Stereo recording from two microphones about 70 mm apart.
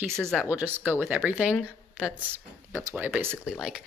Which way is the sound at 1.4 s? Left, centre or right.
Centre.